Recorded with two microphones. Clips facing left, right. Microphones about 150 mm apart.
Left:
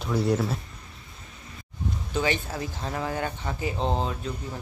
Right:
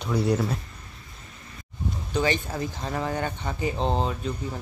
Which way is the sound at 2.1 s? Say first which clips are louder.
Right 2 dB; 10° left (ahead or behind).